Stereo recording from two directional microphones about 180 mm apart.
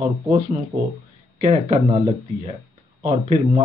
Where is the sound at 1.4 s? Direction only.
35° right (ahead or behind).